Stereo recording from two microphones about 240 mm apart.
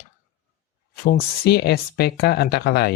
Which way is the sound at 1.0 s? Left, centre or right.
Left.